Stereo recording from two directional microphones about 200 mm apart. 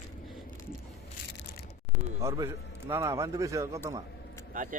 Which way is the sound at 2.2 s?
15° right (ahead or behind).